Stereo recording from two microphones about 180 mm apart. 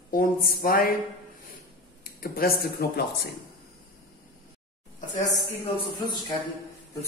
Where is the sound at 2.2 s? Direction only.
55° left (ahead or behind).